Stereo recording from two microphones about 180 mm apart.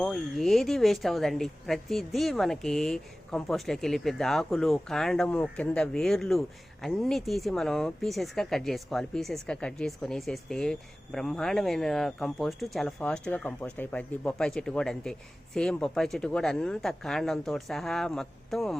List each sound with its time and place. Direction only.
0.0 s speech: centre (ahead or behind)